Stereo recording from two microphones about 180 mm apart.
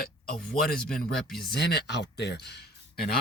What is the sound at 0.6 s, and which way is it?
Speech, 55° left (ahead or behind).